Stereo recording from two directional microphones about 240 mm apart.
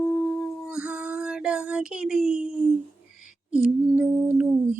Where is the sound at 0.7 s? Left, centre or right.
Centre.